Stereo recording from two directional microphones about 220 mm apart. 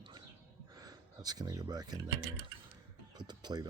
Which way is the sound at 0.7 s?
15° right (ahead or behind).